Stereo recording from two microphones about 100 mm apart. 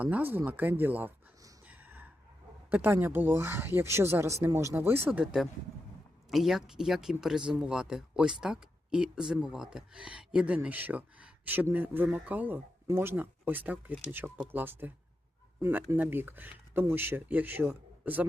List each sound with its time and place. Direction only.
0.0 s speech: 15° right (ahead or behind)
1.6 s a sound: 15° right (ahead or behind)
2.6 s speech: 20° right (ahead or behind)
5.2 s speech: centre (ahead or behind); by 18.3 s 15° right (ahead or behind)